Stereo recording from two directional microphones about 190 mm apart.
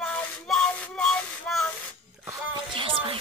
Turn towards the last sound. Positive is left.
turn(degrees=-30)  # may be behind; listen again after turning